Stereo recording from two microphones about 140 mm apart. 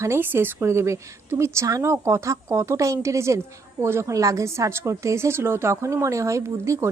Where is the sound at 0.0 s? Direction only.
15° right (ahead or behind).